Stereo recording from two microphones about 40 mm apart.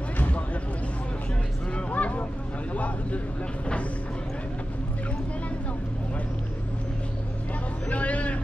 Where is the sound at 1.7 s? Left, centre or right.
Left.